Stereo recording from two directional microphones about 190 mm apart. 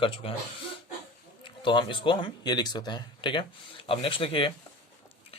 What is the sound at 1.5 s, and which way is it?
Speech, 25° left (ahead or behind).